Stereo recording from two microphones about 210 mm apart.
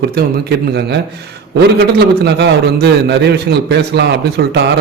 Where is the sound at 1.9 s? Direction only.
50° right (ahead or behind).